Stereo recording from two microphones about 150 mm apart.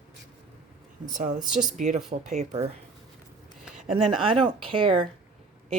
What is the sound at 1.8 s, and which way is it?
Speech, 50° right (ahead or behind).